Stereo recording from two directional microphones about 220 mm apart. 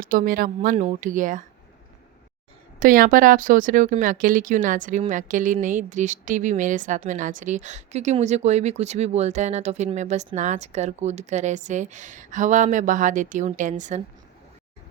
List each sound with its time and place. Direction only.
0.0 s speech: 40° right (ahead or behind)
2.7 s speech: 40° right (ahead or behind)